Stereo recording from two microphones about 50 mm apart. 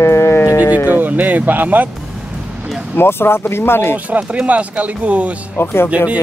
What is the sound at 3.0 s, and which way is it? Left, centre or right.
Speech, left.